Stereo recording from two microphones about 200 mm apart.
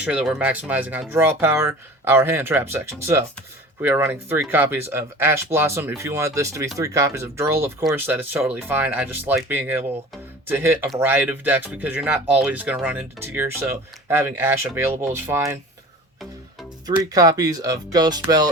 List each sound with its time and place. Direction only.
0.0 s speech: 5° right (ahead or behind)
16.9 s speech: 15° right (ahead or behind)
18.3 s music: 20° right (ahead or behind)